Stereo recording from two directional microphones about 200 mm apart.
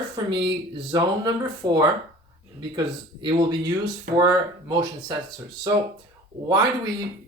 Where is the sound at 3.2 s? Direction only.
20° right (ahead or behind).